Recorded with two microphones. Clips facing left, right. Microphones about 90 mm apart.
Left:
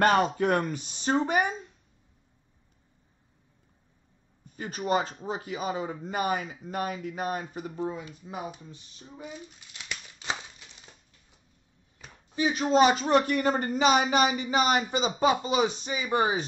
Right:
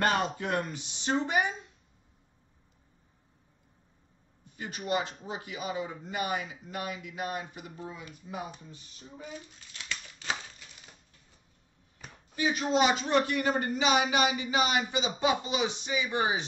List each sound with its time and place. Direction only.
0.0 s speech: 45° left (ahead or behind)
4.6 s speech: 40° left (ahead or behind)
9.2 s a sound: 20° left (ahead or behind)
12.4 s speech: 30° left (ahead or behind)
12.7 s speech: 40° left (ahead or behind)